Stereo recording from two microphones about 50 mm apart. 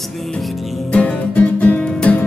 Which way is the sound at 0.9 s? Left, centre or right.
Left.